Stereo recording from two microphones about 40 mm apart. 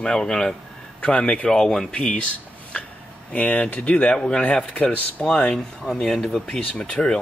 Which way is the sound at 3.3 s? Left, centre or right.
Left.